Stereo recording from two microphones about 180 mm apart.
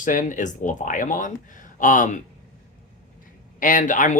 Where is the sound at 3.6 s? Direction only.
45° left (ahead or behind).